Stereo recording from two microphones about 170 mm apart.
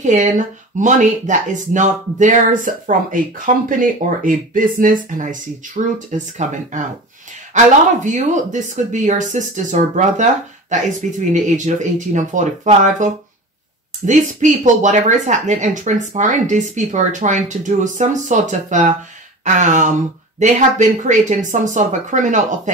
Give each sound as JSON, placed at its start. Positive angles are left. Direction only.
{"t": 0.0, "sound": "speech", "side_deg": -45}
{"t": 6.1, "sound": "speech", "side_deg": -45}